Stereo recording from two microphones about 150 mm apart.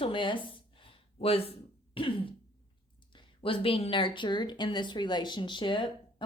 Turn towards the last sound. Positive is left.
turn(degrees=30)  # may be behind; listen again after turning